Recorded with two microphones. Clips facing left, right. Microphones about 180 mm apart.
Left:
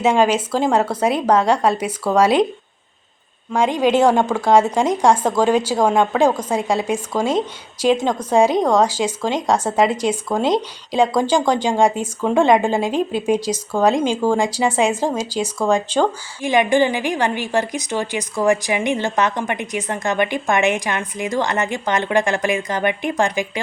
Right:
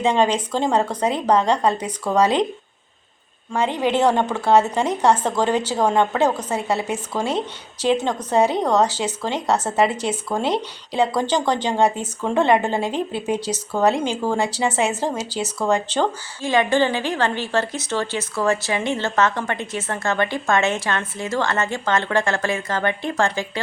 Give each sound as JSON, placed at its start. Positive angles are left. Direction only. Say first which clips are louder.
{"t": 0.0, "sound": "speech", "louder": "left 3 dB", "side_deg": 10}
{"t": 3.5, "sound": "speech", "louder": "left 4 dB", "side_deg": 10}